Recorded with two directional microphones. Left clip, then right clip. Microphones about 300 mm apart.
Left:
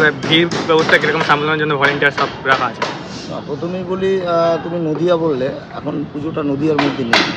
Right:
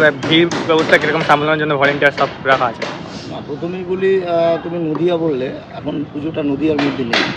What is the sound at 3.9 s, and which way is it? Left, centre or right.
Speech, centre.